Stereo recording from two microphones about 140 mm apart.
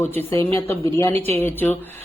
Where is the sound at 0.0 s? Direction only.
15° left (ahead or behind).